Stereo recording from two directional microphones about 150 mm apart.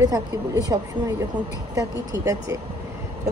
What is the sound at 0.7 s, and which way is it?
A woman's voice, 25° right (ahead or behind).